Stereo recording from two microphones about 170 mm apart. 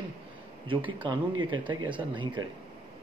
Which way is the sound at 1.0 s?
30° right (ahead or behind).